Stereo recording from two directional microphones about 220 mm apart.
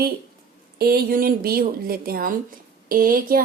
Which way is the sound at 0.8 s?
45° right (ahead or behind).